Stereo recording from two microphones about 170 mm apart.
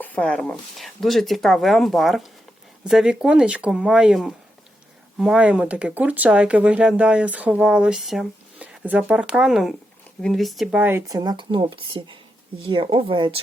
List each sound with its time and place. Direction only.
0.0 s speech: 10° left (ahead or behind); by 13.4 s 30° right (ahead or behind)